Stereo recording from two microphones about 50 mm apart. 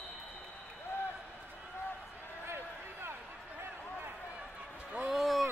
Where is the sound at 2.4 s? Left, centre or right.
Right.